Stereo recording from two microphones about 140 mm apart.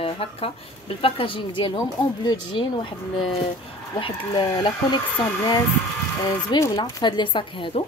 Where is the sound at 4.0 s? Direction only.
40° left (ahead or behind).